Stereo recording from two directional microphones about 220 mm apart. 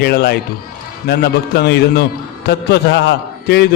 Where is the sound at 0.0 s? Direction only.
45° left (ahead or behind).